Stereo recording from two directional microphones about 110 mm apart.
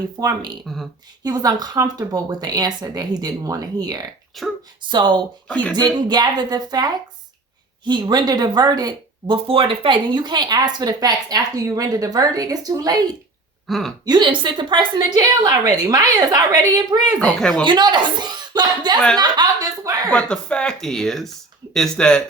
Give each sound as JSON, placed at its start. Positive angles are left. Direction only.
{"t": 0.2, "sound": "speech", "side_deg": -40}
{"t": 4.4, "sound": "speech", "side_deg": 0}
{"t": 4.9, "sound": "a woman's voice", "side_deg": -45}
{"t": 5.5, "sound": "speech", "side_deg": 15}
{"t": 5.7, "sound": "speech", "side_deg": -40}
{"t": 13.7, "sound": "speech", "side_deg": 0}
{"t": 14.0, "sound": "a woman's voice", "side_deg": -40}
{"t": 15.2, "sound": "speech", "side_deg": -35}
{"t": 17.2, "sound": "speech", "side_deg": 10}
{"t": 17.7, "sound": "speech", "side_deg": -40}
{"t": 20.1, "sound": "speech", "side_deg": 10}